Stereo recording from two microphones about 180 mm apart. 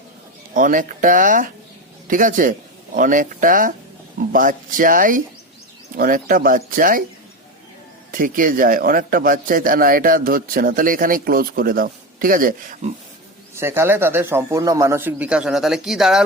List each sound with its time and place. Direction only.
0.5 s a man's voice: 50° right (ahead or behind)
8.1 s a man's voice: 50° right (ahead or behind)
13.6 s speech: 15° right (ahead or behind)